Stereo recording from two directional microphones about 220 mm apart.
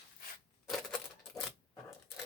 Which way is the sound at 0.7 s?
Centre (ahead or behind).